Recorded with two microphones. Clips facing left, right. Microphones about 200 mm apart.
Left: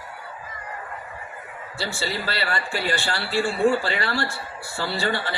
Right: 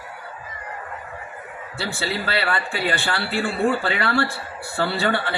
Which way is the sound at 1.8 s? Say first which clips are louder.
Right 2 dB; 60° right (ahead or behind).